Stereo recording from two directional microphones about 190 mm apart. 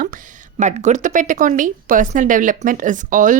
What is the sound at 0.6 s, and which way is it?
Speech, 40° right (ahead or behind).